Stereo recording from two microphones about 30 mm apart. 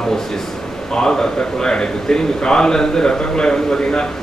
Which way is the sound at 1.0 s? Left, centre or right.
Left.